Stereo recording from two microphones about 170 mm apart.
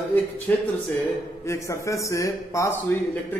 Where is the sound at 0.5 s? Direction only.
10° left (ahead or behind).